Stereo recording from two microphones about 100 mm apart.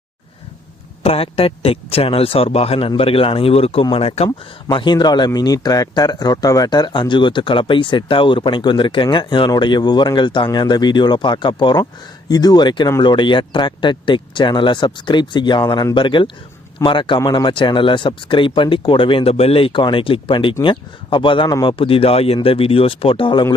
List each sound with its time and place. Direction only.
1.0 s speech: 75° left (ahead or behind)
3.0 s speech: 65° left (ahead or behind)
3.9 s speech: 85° left
4.7 s a man's voice: 50° left (ahead or behind)
15.7 s speech: 40° left (ahead or behind)
16.0 s a man's voice: 55° left (ahead or behind)
17.2 s speech: 45° left (ahead or behind); by 22.4 s 80° left
22.4 s speech: 70° left (ahead or behind)